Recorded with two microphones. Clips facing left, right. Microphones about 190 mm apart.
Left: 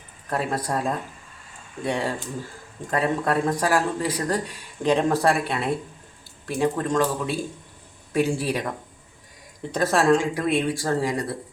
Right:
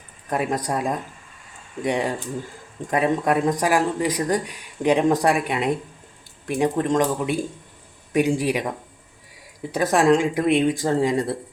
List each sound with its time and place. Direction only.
0.3 s speech: 15° right (ahead or behind)
9.7 s speech: 15° right (ahead or behind)